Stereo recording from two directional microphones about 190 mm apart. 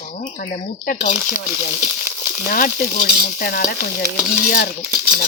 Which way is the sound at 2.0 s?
10° right (ahead or behind).